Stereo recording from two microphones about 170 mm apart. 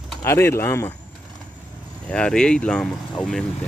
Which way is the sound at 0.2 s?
15° left (ahead or behind).